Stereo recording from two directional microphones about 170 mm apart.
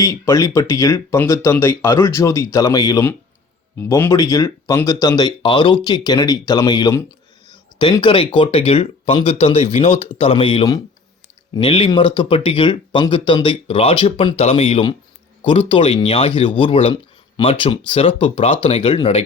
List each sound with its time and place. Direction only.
0.0 s speech: 20° left (ahead or behind)